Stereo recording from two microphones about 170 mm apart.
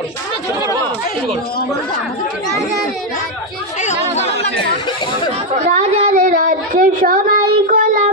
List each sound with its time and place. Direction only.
3.8 s chatter: 40° left (ahead or behind)
5.7 s a sound: 50° right (ahead or behind)
7.0 s child singing: 55° right (ahead or behind)